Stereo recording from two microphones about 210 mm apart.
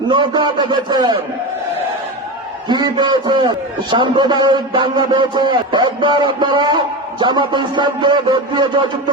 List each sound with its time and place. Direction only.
0.1 s a man's voice: 20° right (ahead or behind)
2.6 s a man's voice: 20° right (ahead or behind)